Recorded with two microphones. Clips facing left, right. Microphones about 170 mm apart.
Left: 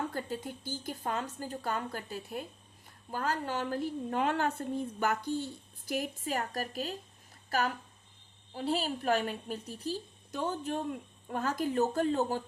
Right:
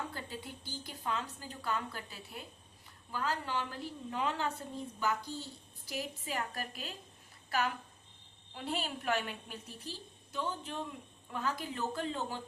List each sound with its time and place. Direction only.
0.1 s a woman's voice: 45° left (ahead or behind)